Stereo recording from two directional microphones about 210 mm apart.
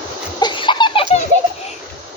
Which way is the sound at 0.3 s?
20° left (ahead or behind).